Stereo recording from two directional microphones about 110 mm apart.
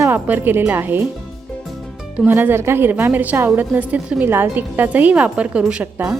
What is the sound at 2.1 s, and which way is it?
A woman's voice, 15° right (ahead or behind).